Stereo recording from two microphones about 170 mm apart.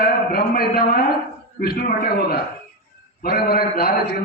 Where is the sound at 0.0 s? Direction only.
65° left (ahead or behind).